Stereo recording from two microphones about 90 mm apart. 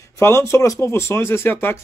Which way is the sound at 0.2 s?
30° left (ahead or behind).